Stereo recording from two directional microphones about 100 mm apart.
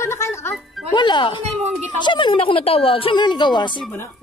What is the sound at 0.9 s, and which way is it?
Speech, 50° left (ahead or behind).